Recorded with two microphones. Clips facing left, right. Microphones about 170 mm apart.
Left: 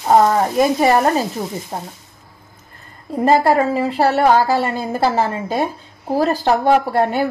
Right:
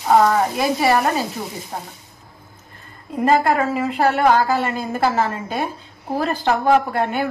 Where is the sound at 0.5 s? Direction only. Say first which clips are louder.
Left 4 dB; 40° left (ahead or behind).